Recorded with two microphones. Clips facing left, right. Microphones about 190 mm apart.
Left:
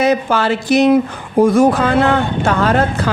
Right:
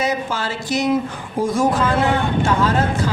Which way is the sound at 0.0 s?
65° left (ahead or behind).